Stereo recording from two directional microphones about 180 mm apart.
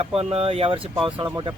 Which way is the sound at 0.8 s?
5° right (ahead or behind).